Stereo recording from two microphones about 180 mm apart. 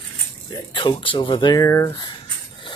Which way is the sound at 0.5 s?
25° left (ahead or behind).